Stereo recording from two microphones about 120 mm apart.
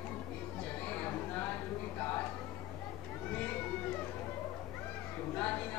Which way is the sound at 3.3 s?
15° left (ahead or behind).